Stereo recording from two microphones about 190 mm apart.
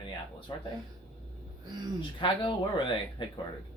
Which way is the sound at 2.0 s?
25° left (ahead or behind).